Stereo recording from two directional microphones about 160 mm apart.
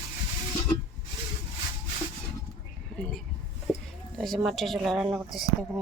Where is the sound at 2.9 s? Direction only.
5° left (ahead or behind).